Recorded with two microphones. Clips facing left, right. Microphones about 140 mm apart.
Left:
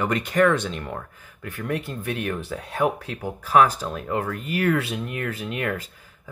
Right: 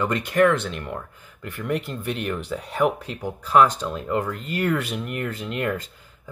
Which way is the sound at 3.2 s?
5° left (ahead or behind).